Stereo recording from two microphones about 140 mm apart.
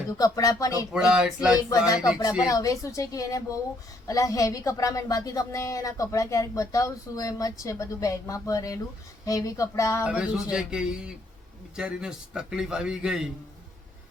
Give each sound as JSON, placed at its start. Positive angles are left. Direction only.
{"t": 0.1, "sound": "speech", "side_deg": 25}
{"t": 0.9, "sound": "a man's voice", "side_deg": -5}
{"t": 2.4, "sound": "speech", "side_deg": 25}
{"t": 10.0, "sound": "a man's voice", "side_deg": -5}